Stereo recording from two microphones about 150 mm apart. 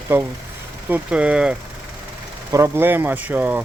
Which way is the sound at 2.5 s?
20° right (ahead or behind).